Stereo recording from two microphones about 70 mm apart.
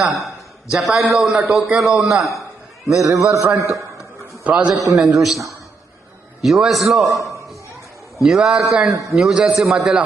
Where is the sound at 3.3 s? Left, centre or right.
Right.